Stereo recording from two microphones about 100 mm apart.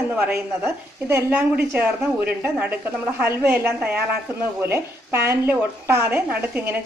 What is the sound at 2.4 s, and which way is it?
Speech, 15° right (ahead or behind).